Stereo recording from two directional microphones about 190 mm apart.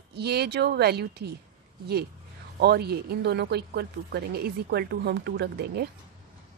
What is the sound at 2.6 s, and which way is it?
Speech, 60° right (ahead or behind).